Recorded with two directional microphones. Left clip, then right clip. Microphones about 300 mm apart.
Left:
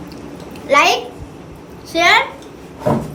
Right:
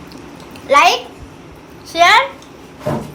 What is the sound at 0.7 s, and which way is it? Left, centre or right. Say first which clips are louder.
Speech: right 2 dB; centre.